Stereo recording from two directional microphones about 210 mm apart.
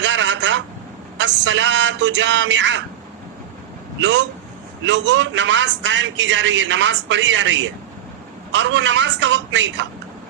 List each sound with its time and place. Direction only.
0.0 s a sound: 60° right (ahead or behind)
1.2 s a man's voice: 60° right (ahead or behind)
4.0 s a man's voice: 60° right (ahead or behind)